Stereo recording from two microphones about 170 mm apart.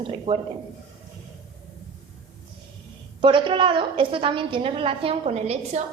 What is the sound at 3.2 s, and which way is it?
A woman's voice, 30° right (ahead or behind).